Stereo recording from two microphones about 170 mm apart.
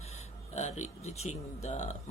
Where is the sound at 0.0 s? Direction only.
40° left (ahead or behind).